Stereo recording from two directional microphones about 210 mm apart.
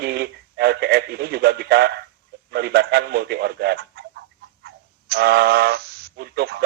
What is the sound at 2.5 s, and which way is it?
A man's voice, 50° right (ahead or behind).